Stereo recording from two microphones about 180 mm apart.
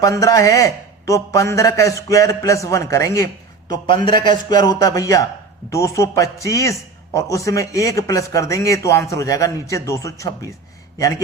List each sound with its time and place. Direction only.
0.0 s a man's voice: 20° left (ahead or behind)